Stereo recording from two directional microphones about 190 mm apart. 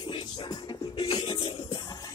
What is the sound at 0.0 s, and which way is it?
Music, 25° left (ahead or behind).